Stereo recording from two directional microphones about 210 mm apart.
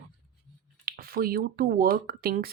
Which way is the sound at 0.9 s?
45° right (ahead or behind).